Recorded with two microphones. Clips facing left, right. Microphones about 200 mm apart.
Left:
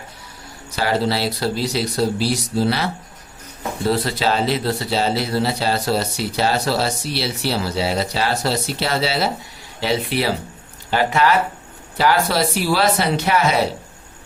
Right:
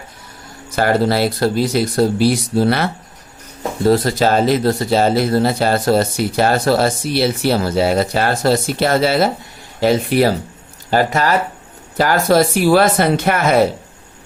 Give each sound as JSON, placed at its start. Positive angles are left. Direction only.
{"t": 0.8, "sound": "speech", "side_deg": -50}
{"t": 3.8, "sound": "speech", "side_deg": -45}